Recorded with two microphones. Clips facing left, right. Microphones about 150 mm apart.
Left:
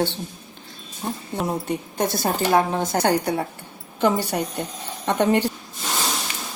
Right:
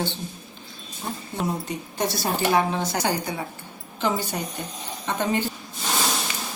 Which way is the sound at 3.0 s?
65° left (ahead or behind).